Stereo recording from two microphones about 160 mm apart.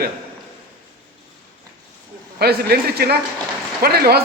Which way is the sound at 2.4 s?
80° right.